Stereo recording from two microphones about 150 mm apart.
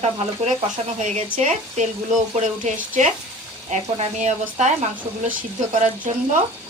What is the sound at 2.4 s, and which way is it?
A woman's voice, 55° right (ahead or behind).